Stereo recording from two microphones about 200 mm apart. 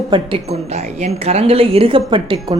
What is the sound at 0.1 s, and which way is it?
Speech, 25° right (ahead or behind).